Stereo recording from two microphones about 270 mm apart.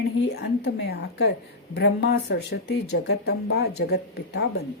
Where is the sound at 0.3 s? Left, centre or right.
Left.